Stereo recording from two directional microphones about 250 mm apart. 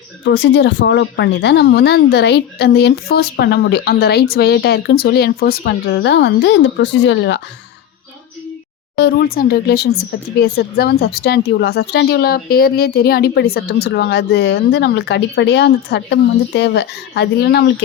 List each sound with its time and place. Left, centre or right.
0.3 s speech: left
9.0 s speech: left